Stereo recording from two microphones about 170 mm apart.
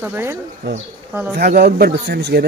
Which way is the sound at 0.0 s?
10° right (ahead or behind).